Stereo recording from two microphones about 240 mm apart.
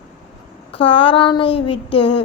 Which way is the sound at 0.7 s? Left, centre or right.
Left.